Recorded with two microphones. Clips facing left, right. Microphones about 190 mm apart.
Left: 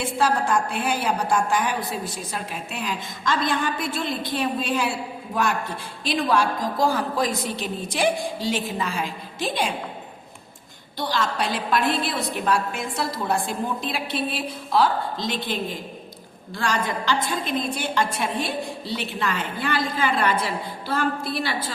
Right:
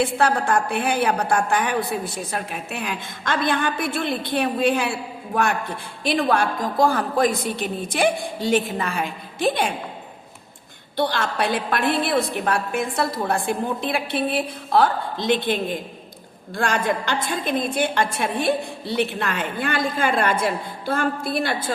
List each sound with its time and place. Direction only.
0.0 s a woman's voice: 60° right (ahead or behind)
10.9 s a woman's voice: 60° right (ahead or behind)
16.6 s a woman's voice: 55° right (ahead or behind)